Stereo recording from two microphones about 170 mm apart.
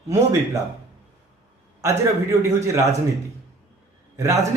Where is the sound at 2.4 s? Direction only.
15° right (ahead or behind).